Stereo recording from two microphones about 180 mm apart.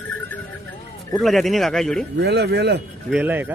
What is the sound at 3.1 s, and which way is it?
Speech, 10° right (ahead or behind).